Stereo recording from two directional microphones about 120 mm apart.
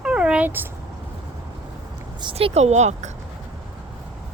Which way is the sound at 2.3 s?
60° right (ahead or behind).